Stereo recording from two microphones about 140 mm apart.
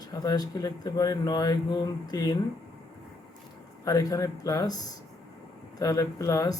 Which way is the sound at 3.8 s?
25° left (ahead or behind).